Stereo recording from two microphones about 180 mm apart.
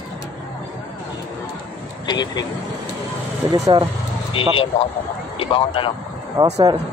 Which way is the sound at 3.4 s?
25° right (ahead or behind).